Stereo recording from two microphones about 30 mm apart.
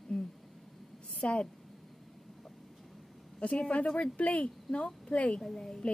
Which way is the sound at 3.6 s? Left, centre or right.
Left.